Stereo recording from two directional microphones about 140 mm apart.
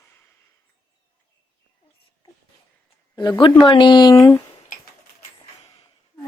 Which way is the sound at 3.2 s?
35° left (ahead or behind).